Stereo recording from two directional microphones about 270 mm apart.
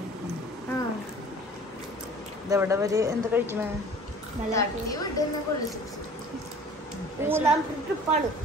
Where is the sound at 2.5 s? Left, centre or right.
Centre.